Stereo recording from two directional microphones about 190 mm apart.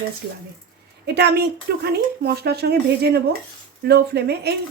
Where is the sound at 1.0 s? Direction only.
60° right (ahead or behind).